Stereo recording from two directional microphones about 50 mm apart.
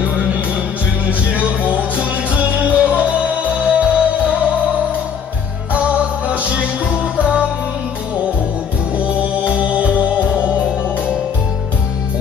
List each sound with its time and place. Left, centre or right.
1.3 s music: right
5.7 s music: right
8.9 s music: right